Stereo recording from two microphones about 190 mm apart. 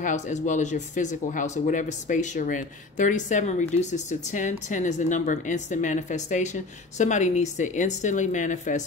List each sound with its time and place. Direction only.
0.0 s speech: 40° left (ahead or behind)